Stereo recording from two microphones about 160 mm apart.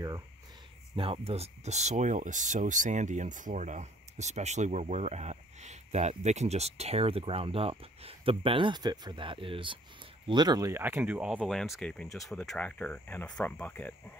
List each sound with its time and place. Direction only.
0.9 s speech: 35° right (ahead or behind); by 13.9 s 10° left (ahead or behind)